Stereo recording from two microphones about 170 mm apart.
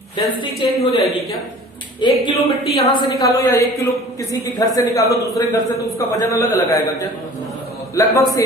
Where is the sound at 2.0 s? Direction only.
25° left (ahead or behind).